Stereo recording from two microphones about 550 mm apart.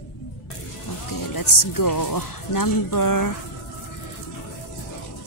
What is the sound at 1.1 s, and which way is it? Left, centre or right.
Speech, left.